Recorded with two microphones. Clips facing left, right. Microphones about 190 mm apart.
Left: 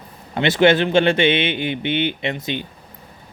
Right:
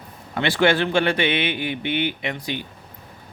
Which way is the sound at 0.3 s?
20° left (ahead or behind).